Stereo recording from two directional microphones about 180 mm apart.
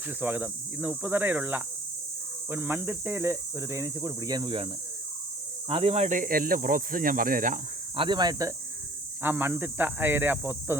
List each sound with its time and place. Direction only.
0.2 s speech: 10° right (ahead or behind); by 7.6 s 50° right (ahead or behind)
7.9 s speech: 25° right (ahead or behind)